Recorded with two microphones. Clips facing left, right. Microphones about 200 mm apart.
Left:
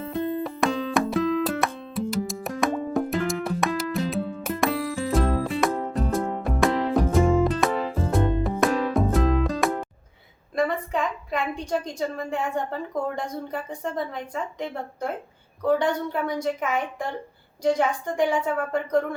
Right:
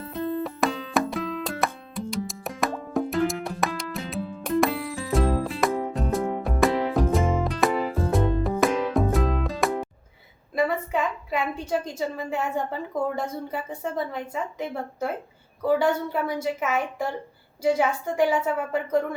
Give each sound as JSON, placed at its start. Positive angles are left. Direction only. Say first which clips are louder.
{"t": 0.0, "sound": "music", "louder": "left 1 dB", "side_deg": 0}
{"t": 10.5, "sound": "a woman's voice", "louder": "even", "side_deg": -5}